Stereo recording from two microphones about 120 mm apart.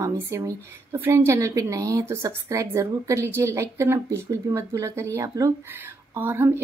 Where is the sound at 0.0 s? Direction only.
25° right (ahead or behind).